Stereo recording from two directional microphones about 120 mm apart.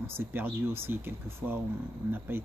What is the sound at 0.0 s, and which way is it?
Speech, 20° right (ahead or behind).